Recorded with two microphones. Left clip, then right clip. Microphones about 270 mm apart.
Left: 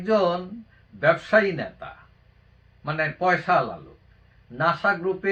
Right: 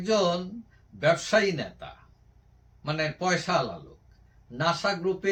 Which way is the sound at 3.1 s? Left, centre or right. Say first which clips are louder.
Left 7 dB; centre.